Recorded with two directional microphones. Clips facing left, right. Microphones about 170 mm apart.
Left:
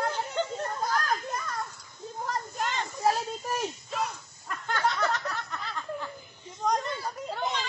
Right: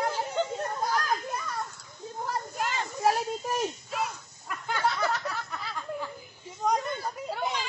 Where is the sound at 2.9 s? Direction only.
20° right (ahead or behind).